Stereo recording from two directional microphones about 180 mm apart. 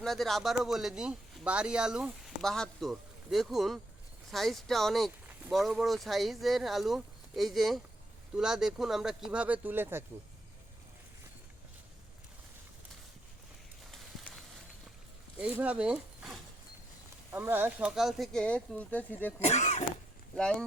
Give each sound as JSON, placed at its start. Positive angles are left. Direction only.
{"t": 0.0, "sound": "speech", "side_deg": 0}
{"t": 13.9, "sound": "a sound", "side_deg": 0}
{"t": 15.4, "sound": "speech", "side_deg": -5}
{"t": 19.4, "sound": "speech", "side_deg": 40}
{"t": 20.3, "sound": "speech", "side_deg": 5}